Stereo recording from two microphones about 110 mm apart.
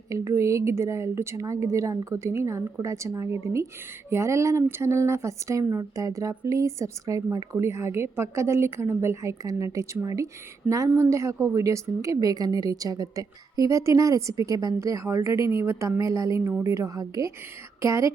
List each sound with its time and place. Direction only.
0.1 s a woman's voice: 30° right (ahead or behind)